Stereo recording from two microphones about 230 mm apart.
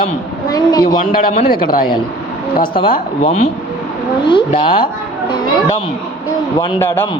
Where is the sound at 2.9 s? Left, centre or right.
Left.